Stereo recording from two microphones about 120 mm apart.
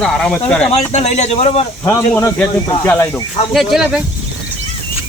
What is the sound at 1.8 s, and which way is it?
Speech, 20° left (ahead or behind).